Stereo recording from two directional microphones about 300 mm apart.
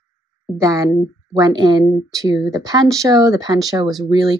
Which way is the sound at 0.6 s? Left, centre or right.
Centre.